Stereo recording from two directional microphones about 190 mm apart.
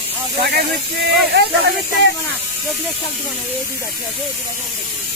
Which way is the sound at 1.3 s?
60° right (ahead or behind).